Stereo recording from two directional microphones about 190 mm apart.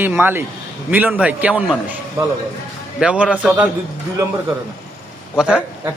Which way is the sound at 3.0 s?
5° right (ahead or behind).